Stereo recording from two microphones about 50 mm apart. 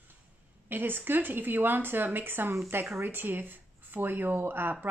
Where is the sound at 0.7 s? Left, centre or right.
Right.